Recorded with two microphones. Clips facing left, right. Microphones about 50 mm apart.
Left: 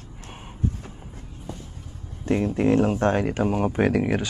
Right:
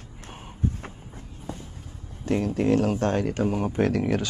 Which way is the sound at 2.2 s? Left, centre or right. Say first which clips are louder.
Left 2 dB; left.